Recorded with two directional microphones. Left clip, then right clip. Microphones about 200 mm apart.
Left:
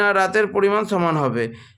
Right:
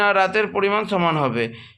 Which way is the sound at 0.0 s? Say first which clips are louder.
Even; 35° left (ahead or behind).